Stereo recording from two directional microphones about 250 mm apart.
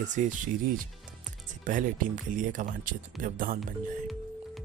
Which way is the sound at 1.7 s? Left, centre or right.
Right.